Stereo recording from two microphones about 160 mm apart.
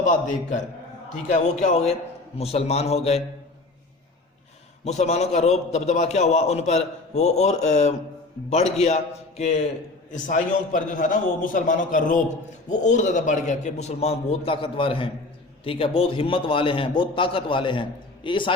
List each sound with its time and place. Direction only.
0.0 s a man's voice: 55° left (ahead or behind)
4.9 s a man's voice: 45° left (ahead or behind)